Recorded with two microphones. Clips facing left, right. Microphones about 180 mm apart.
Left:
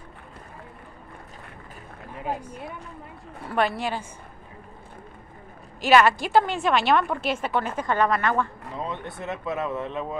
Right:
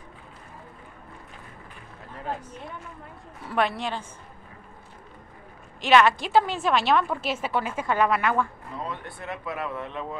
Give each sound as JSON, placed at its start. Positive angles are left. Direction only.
{"t": 2.1, "sound": "a woman's voice", "side_deg": 10}
{"t": 5.8, "sound": "a woman's voice", "side_deg": 5}
{"t": 8.8, "sound": "speech", "side_deg": 20}